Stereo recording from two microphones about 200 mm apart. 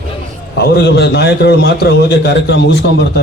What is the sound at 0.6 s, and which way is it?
A man's voice, 55° left (ahead or behind).